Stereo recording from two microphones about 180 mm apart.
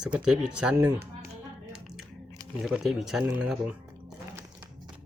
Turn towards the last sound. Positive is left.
turn(degrees=-5)  # may be behind; listen again after turning